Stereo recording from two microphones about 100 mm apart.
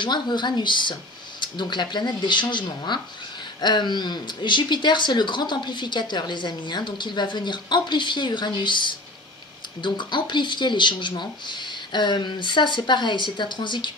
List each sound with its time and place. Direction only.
0.0 s speech: 50° left (ahead or behind)